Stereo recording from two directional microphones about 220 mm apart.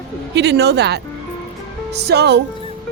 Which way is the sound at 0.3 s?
50° right (ahead or behind).